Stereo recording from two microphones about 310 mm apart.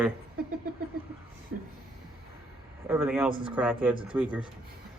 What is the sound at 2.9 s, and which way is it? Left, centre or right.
Speech, centre.